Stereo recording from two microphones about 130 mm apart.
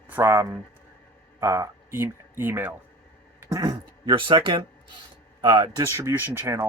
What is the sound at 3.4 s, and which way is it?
Speech, 30° right (ahead or behind).